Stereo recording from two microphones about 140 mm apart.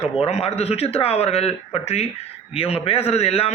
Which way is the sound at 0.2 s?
50° left (ahead or behind).